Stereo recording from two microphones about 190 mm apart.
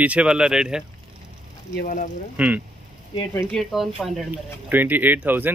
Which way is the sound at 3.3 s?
15° left (ahead or behind).